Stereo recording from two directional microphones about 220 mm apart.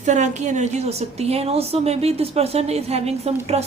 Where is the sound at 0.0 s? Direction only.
35° right (ahead or behind).